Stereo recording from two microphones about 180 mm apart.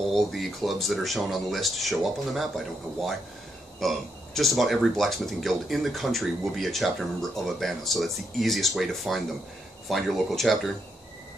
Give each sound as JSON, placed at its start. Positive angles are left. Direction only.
{"t": 0.0, "sound": "speech", "side_deg": 0}